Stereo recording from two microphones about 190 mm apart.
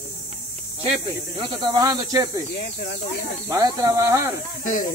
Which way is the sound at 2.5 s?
60° left (ahead or behind).